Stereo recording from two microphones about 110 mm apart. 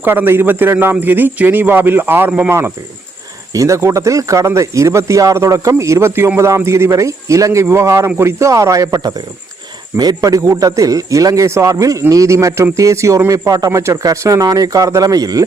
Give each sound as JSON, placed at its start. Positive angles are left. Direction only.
{"t": 0.0, "sound": "a man's voice", "side_deg": -20}